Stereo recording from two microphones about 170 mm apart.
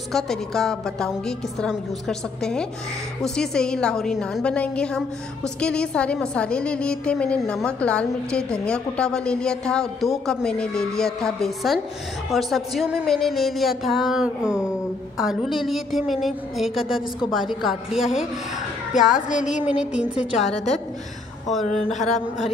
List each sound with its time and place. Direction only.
0.1 s a woman's voice: 5° left (ahead or behind)
19.1 s a sound: 50° left (ahead or behind)
19.6 s a woman's voice: 5° right (ahead or behind)
21.5 s a woman's voice: centre (ahead or behind)